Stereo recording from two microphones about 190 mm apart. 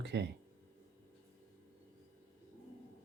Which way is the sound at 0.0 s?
65° right (ahead or behind).